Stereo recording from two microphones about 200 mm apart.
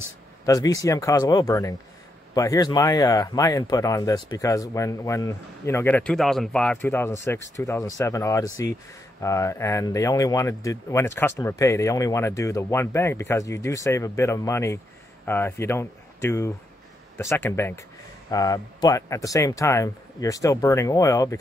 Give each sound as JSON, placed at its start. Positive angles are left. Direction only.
{"t": 0.5, "sound": "speech", "side_deg": 20}